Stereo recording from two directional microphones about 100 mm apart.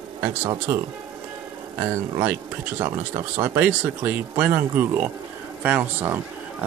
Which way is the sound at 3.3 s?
20° right (ahead or behind).